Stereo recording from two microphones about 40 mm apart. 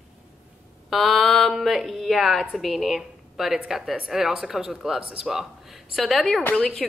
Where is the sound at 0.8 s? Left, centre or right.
Centre.